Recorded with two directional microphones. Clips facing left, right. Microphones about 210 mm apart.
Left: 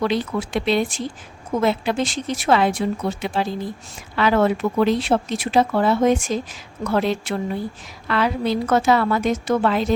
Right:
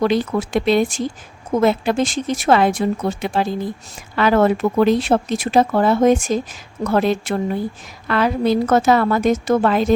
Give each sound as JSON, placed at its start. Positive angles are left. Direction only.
{"t": 0.0, "sound": "speech", "side_deg": -45}